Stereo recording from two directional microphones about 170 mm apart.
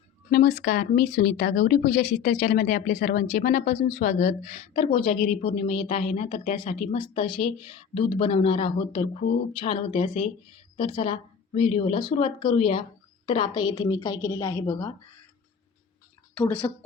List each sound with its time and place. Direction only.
0.3 s a woman's voice: 50° left (ahead or behind); by 14.9 s 15° left (ahead or behind)
16.4 s speech: 10° left (ahead or behind)